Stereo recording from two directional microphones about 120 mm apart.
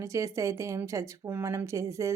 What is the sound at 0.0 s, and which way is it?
Speech, 25° right (ahead or behind).